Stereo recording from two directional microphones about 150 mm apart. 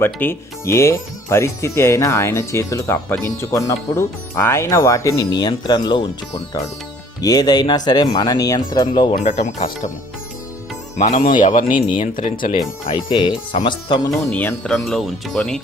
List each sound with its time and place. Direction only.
0.0 s speech: 15° left (ahead or behind); by 6.1 s 30° left (ahead or behind)
7.2 s speech: 25° left (ahead or behind)
9.2 s speech: 50° left (ahead or behind)
10.9 s speech: 50° left (ahead or behind)
11.2 s speech: 60° left (ahead or behind)
11.7 s speech: 35° left (ahead or behind)
12.1 s speech: 65° left (ahead or behind)
13.1 s speech: 30° left (ahead or behind)
14.1 s speech: 10° left (ahead or behind)